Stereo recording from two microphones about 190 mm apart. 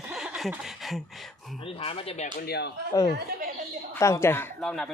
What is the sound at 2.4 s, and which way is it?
Speech, 60° left (ahead or behind).